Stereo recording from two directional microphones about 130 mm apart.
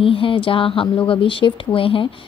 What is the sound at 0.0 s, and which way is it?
A woman's voice, 45° left (ahead or behind).